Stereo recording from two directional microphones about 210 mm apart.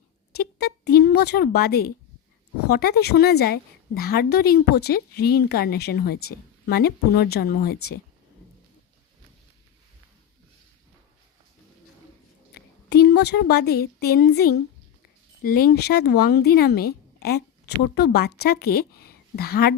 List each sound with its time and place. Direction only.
0.3 s a sound: 50° left (ahead or behind)
2.8 s a woman's voice: 50° left (ahead or behind)
12.5 s a woman's voice: 50° left (ahead or behind)
17.9 s a woman's voice: 50° left (ahead or behind)